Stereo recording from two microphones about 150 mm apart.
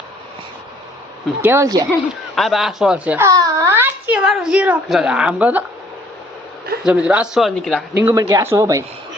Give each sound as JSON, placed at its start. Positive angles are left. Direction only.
{"t": 1.4, "sound": "speech", "side_deg": -15}
{"t": 2.3, "sound": "speech", "side_deg": 0}
{"t": 3.2, "sound": "speech", "side_deg": -20}
{"t": 6.8, "sound": "speech", "side_deg": -5}
{"t": 7.9, "sound": "speech", "side_deg": -20}